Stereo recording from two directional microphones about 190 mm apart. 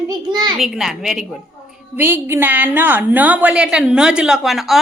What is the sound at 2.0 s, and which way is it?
A woman's voice, 10° right (ahead or behind).